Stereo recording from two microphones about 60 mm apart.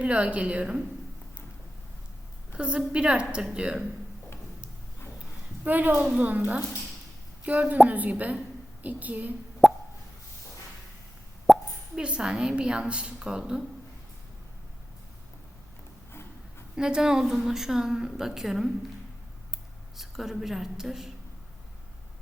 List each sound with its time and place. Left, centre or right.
0.0 s a woman's voice: right
2.6 s a woman's voice: centre
5.6 s a woman's voice: right
9.6 s plop: centre
11.5 s plop: centre
11.9 s a woman's voice: centre
16.7 s a woman's voice: centre
20.0 s a woman's voice: centre